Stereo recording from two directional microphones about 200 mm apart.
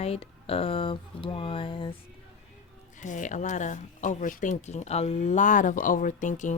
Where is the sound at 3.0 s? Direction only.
40° left (ahead or behind).